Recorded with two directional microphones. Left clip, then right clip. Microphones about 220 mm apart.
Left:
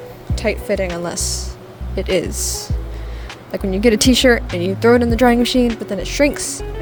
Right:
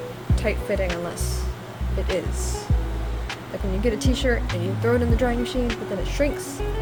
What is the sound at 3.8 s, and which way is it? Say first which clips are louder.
Speech: left 11 dB; 40° left (ahead or behind).